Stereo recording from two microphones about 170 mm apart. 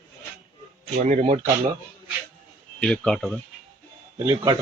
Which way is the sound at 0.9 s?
45° right (ahead or behind).